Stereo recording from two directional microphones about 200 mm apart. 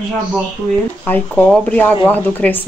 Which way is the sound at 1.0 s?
10° left (ahead or behind).